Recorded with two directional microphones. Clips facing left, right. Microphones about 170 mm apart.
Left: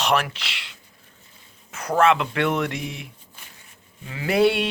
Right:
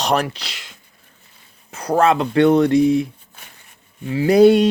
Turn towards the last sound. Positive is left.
turn(degrees=-40)  # may be behind; listen again after turning